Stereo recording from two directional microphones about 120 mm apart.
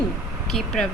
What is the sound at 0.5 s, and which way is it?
Speech, 5° left (ahead or behind).